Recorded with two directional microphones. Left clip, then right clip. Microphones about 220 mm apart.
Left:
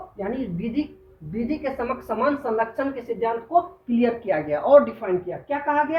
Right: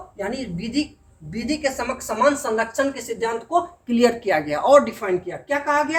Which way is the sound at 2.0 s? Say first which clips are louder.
Right 5 dB; 30° right (ahead or behind).